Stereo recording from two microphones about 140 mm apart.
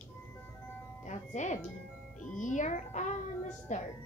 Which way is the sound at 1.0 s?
55° left (ahead or behind).